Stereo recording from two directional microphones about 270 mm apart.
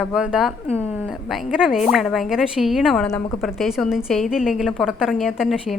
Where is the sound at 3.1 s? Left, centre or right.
Centre.